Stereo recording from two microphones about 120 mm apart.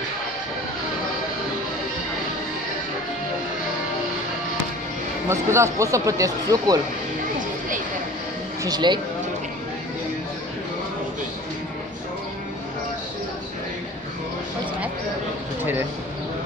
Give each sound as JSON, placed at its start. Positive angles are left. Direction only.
{"t": 5.3, "sound": "speech", "side_deg": -25}
{"t": 8.6, "sound": "speech", "side_deg": -40}